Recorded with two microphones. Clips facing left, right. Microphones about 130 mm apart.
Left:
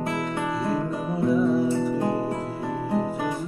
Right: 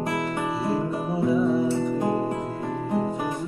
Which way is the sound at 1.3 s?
Centre (ahead or behind).